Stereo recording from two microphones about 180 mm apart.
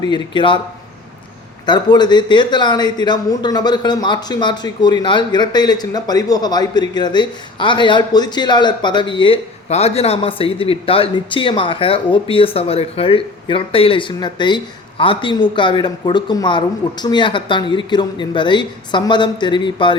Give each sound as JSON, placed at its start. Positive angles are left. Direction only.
{"t": 0.0, "sound": "speech", "side_deg": 25}
{"t": 1.6, "sound": "speech", "side_deg": 25}